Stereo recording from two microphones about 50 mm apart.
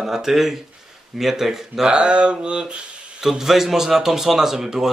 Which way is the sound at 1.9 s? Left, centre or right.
Right.